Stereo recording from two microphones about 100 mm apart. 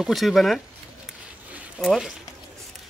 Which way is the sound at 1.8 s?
5° left (ahead or behind).